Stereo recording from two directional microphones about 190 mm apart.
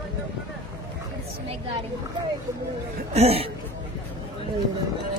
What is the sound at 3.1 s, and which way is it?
Speech, 35° right (ahead or behind).